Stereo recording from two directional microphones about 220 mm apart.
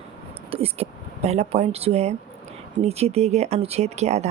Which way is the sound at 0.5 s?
25° right (ahead or behind).